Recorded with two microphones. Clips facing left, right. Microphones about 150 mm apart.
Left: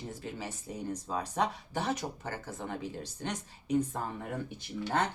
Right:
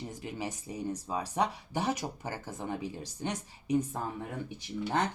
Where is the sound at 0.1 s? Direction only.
15° right (ahead or behind).